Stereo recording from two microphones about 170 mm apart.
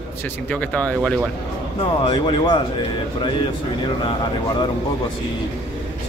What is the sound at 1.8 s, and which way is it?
Speech, 30° left (ahead or behind).